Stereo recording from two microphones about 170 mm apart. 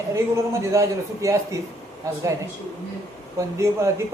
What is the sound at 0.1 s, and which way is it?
A man's voice, 15° right (ahead or behind).